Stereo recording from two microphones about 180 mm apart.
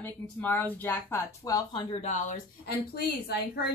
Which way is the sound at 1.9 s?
40° left (ahead or behind).